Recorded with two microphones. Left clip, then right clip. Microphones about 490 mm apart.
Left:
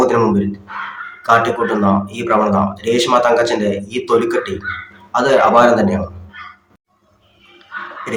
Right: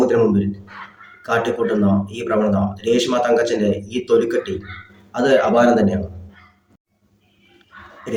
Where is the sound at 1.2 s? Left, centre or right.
Right.